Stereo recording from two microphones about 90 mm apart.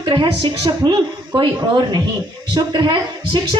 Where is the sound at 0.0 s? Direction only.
65° right (ahead or behind).